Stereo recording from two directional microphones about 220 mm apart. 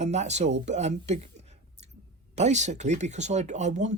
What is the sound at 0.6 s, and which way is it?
Speech, 30° right (ahead or behind).